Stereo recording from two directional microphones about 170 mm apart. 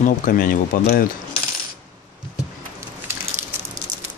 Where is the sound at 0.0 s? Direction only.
55° left (ahead or behind).